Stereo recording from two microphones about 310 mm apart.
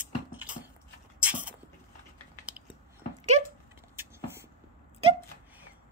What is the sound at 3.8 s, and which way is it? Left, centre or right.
Beatboxing, centre.